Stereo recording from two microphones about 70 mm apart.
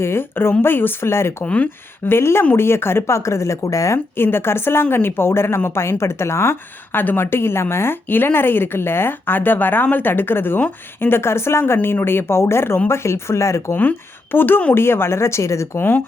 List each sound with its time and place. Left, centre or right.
0.0 s speech: left
1.5 s speech: left
2.0 s speech: left
3.9 s speech: left
14.3 s speech: left
15.8 s speech: left